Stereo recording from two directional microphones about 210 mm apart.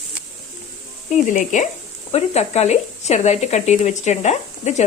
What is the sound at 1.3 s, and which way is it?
Speech, 35° left (ahead or behind).